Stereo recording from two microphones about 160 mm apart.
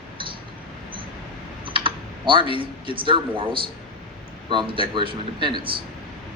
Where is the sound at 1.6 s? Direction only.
30° right (ahead or behind).